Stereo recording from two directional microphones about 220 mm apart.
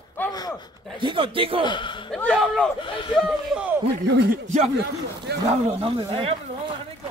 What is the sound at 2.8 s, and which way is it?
Speech, 20° left (ahead or behind).